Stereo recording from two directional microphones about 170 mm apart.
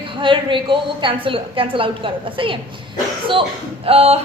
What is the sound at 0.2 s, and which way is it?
A woman's voice, 30° right (ahead or behind).